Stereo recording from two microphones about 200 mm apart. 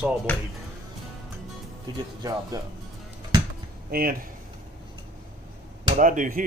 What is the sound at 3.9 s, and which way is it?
Speech, 45° right (ahead or behind).